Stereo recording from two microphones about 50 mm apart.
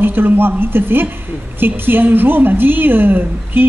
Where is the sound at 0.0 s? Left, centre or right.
Right.